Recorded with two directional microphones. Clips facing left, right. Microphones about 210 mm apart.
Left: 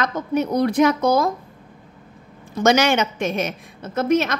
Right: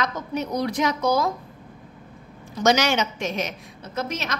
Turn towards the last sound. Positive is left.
turn(degrees=55)  # may be behind; listen again after turning